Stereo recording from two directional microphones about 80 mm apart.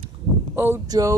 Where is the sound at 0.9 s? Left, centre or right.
Right.